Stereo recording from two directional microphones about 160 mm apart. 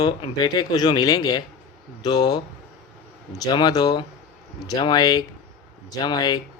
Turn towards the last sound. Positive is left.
turn(degrees=25)  # may be behind; listen again after turning